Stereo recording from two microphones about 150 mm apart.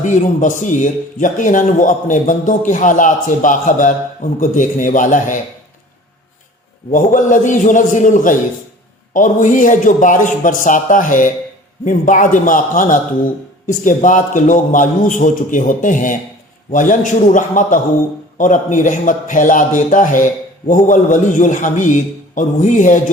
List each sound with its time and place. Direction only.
0.0 s a man's voice: 55° left (ahead or behind)
6.9 s a man's voice: 60° left (ahead or behind)